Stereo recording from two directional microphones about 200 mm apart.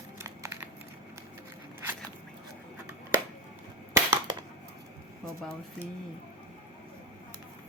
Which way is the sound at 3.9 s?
15° right (ahead or behind).